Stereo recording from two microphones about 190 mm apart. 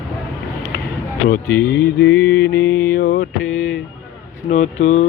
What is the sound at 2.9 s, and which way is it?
Mantra, 55° left (ahead or behind).